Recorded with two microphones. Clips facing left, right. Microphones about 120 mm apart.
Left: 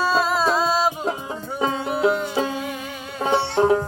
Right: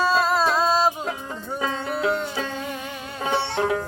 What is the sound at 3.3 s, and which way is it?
Music, 30° left (ahead or behind).